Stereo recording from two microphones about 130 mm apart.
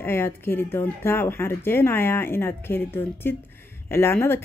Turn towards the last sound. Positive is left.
turn(degrees=20)  # may be behind; listen again after turning